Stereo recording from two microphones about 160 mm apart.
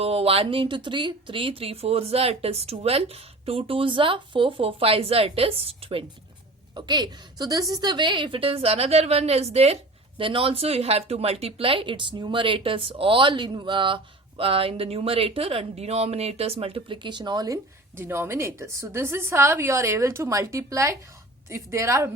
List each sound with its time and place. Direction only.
0.0 s a woman's voice: 40° right (ahead or behind); by 22.1 s 20° right (ahead or behind)